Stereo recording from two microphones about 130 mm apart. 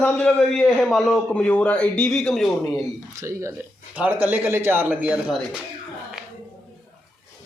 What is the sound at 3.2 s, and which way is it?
Speech, 25° right (ahead or behind).